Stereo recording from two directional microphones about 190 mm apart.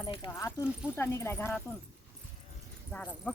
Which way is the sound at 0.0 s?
25° left (ahead or behind).